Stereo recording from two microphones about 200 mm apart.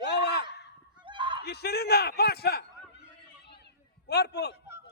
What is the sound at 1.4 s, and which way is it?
Speech, 55° left (ahead or behind).